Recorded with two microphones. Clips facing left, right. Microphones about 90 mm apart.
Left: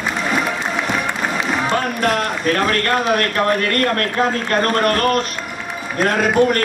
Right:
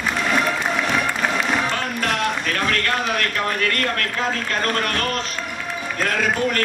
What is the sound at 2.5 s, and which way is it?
Speech, 40° left (ahead or behind).